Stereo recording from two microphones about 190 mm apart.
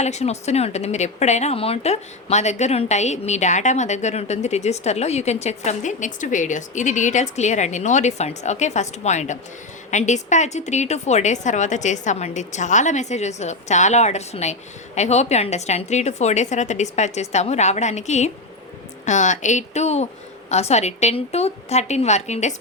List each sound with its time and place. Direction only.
0.0 s speech: 35° left (ahead or behind)